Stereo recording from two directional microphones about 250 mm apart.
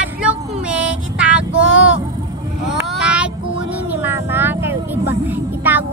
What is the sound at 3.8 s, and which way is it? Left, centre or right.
Speech, centre.